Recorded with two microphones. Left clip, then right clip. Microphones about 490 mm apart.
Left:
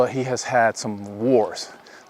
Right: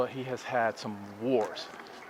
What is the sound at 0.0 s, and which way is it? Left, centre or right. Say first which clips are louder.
A man's voice: left 11 dB; left.